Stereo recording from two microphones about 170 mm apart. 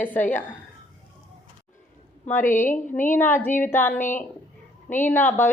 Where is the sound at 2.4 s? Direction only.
50° left (ahead or behind).